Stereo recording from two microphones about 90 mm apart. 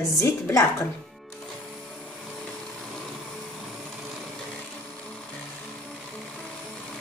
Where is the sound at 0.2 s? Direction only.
30° left (ahead or behind).